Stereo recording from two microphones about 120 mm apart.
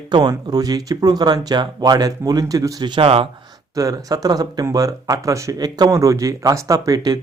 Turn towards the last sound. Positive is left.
turn(degrees=-30)  # may be behind; listen again after turning